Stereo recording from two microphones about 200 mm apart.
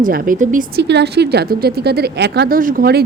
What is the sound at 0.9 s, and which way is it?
Speech, 55° right (ahead or behind).